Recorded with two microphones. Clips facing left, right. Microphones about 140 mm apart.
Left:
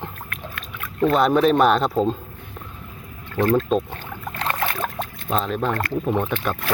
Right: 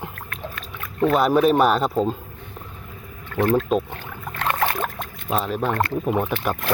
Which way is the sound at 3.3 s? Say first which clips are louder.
Even; 15° right (ahead or behind).